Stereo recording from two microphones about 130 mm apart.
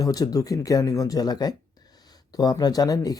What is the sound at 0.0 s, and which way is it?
Speech, 30° left (ahead or behind).